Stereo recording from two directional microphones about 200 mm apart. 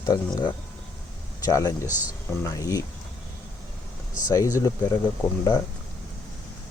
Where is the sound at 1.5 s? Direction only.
15° left (ahead or behind).